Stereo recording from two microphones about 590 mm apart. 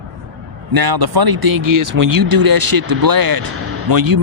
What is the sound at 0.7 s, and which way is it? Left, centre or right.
Speech, right.